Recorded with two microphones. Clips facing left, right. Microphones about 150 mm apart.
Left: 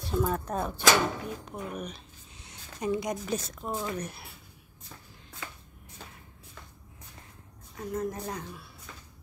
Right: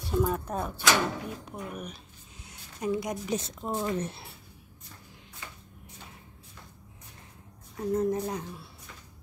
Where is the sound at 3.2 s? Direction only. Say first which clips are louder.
Right 1 dB; 20° right (ahead or behind).